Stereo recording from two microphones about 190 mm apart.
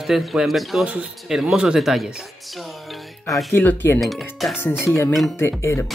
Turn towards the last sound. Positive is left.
turn(degrees=15)  # may be behind; listen again after turning